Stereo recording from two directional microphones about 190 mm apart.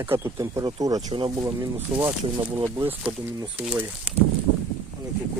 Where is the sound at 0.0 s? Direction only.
10° right (ahead or behind).